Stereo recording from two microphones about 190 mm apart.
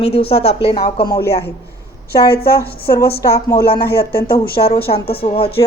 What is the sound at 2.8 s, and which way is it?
Speech, 55° left (ahead or behind).